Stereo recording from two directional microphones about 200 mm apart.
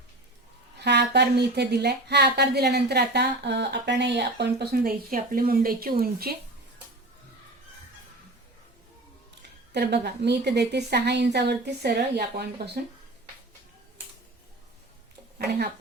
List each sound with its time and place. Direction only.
0.8 s speech: 55° right (ahead or behind)
9.7 s speech: 55° right (ahead or behind)
15.4 s speech: 50° right (ahead or behind)